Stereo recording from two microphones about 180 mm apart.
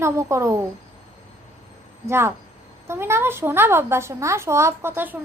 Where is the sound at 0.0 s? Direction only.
15° right (ahead or behind).